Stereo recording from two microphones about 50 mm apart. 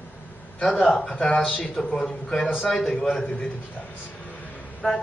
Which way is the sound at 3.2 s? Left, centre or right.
Left.